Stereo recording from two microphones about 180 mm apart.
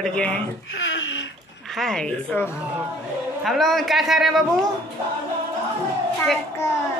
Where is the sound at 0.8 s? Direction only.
90° left.